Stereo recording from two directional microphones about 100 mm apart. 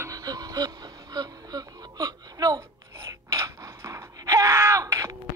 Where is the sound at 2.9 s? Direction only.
30° right (ahead or behind).